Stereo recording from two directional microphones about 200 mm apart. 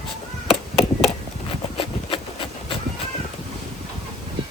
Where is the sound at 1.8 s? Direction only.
25° left (ahead or behind).